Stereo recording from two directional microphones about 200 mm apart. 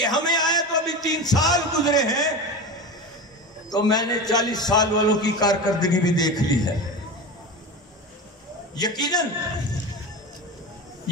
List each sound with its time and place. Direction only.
0.0 s a sound: 20° left (ahead or behind)
3.7 s a man's voice: 20° left (ahead or behind)
8.7 s a man's voice: 20° left (ahead or behind)